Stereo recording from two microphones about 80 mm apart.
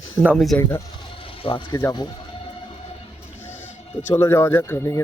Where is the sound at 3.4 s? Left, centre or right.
Left.